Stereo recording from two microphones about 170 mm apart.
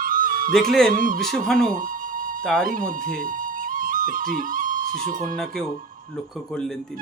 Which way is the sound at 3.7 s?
55° right (ahead or behind).